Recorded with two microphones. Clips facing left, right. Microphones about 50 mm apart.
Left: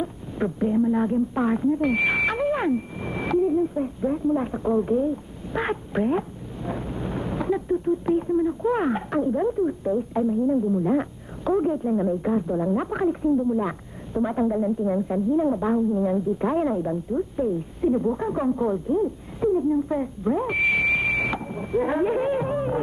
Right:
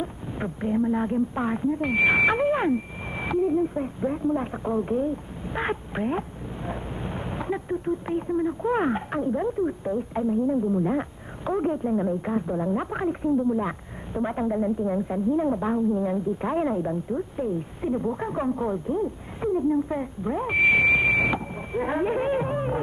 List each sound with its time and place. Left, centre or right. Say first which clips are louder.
0.0 s speech: left 4 dB; centre
10.4 s speech: left 2 dB; centre
17.8 s speech: left 5 dB; centre
18.3 s speech: left 3 dB; centre
19.4 s a sound: left 2 dB; centre